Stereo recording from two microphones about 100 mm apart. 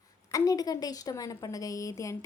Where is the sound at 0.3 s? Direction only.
35° left (ahead or behind).